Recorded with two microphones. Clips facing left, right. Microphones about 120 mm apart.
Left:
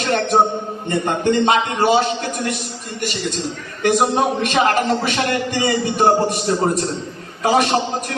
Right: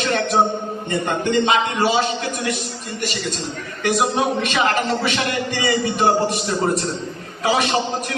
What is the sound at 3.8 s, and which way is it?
A man's voice, 45° left (ahead or behind).